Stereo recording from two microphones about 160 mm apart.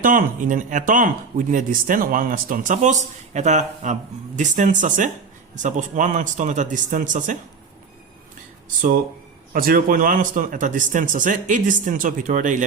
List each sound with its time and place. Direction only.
0.0 s speech: 55° right (ahead or behind)
9.5 s speech: 65° right (ahead or behind)